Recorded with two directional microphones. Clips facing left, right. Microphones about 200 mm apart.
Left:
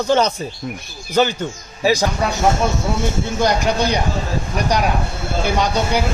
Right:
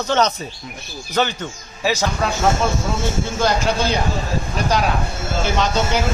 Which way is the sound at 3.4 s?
15° left (ahead or behind).